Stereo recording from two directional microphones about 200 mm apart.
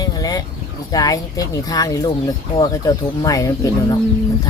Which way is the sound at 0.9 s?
20° left (ahead or behind).